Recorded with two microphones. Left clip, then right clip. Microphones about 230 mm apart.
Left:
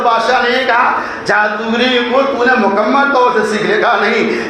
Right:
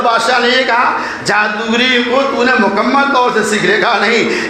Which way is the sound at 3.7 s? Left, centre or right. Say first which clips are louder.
Right 1 dB; right.